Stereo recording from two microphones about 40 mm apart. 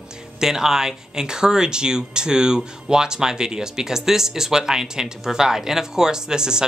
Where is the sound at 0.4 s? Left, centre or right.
Centre.